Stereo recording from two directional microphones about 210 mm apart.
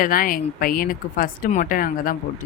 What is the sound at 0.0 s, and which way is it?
A woman's voice, 40° left (ahead or behind).